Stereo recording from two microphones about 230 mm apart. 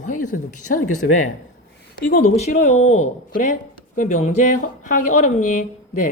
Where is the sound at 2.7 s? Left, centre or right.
Left.